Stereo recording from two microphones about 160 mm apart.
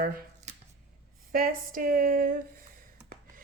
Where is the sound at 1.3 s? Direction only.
60° right (ahead or behind).